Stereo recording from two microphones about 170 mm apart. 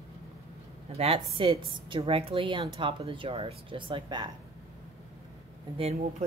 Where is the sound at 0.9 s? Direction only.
35° right (ahead or behind).